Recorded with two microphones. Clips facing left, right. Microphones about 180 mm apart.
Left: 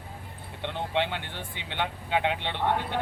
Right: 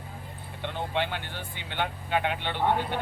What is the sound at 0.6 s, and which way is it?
Speech, 25° left (ahead or behind).